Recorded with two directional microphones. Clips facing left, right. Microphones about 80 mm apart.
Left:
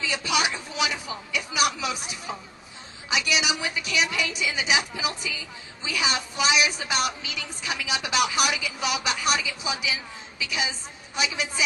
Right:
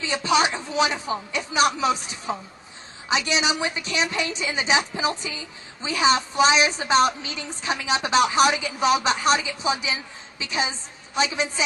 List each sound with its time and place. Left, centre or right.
0.0 s a woman's voice: right